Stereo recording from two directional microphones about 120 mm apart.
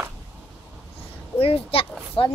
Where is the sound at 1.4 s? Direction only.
50° left (ahead or behind).